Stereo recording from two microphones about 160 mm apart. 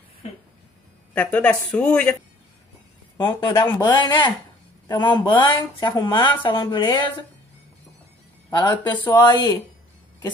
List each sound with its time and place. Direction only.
1.1 s a woman's voice: 10° left (ahead or behind)
3.2 s a woman's voice: 30° left (ahead or behind)
8.5 s a woman's voice: 25° left (ahead or behind)